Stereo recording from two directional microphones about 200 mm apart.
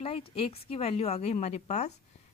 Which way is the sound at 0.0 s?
30° left (ahead or behind).